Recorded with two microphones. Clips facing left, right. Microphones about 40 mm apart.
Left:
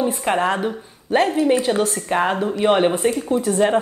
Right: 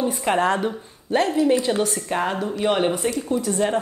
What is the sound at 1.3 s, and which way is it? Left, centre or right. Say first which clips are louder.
Speech: left 1 dB; left.